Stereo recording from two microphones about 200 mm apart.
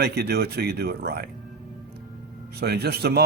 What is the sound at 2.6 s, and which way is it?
Speech, 55° right (ahead or behind).